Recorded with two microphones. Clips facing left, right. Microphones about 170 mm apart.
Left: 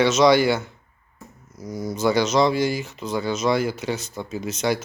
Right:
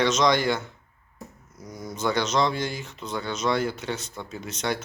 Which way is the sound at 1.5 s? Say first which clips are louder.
Left 10 dB; 90° left.